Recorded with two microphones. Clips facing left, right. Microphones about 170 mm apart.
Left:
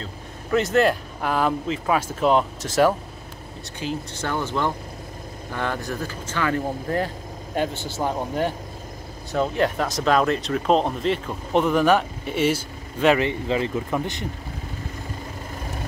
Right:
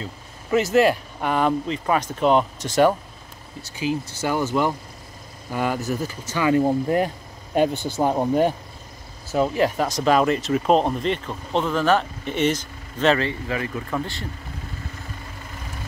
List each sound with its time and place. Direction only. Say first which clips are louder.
0.0 s speech: even; 5° right (ahead or behind)
9.3 s speech: right 2 dB; 5° right (ahead or behind)
11.5 s speech: left 2 dB; 15° left (ahead or behind)